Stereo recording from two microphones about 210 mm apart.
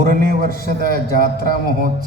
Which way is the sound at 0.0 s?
40° right (ahead or behind).